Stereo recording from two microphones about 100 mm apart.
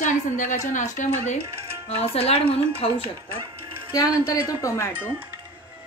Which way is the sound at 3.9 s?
40° left (ahead or behind).